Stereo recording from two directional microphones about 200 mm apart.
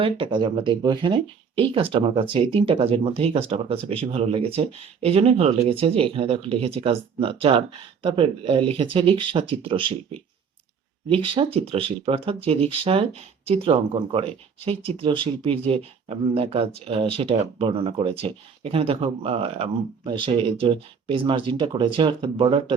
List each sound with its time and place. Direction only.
0.0 s speech: 25° right (ahead or behind)
11.1 s speech: 25° right (ahead or behind)